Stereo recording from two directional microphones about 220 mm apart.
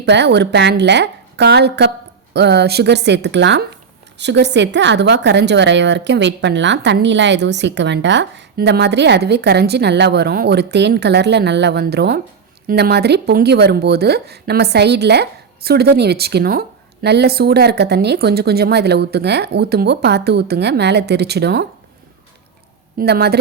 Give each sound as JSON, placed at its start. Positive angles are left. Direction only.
{"t": 0.0, "sound": "speech", "side_deg": -50}
{"t": 23.0, "sound": "speech", "side_deg": -45}